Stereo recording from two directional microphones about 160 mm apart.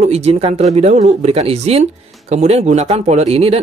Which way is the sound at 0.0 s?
40° right (ahead or behind).